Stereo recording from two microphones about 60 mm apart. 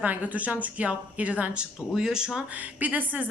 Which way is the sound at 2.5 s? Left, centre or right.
Right.